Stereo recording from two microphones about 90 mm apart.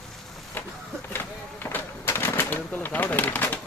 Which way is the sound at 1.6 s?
25° left (ahead or behind).